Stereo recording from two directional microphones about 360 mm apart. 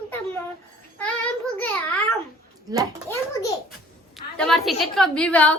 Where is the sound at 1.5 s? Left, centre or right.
Centre.